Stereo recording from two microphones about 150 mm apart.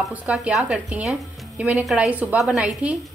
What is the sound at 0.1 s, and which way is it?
A woman's voice, 10° right (ahead or behind).